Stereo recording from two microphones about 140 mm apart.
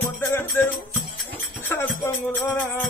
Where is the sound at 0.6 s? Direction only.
15° left (ahead or behind).